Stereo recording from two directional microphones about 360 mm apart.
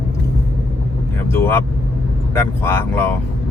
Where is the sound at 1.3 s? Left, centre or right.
Centre.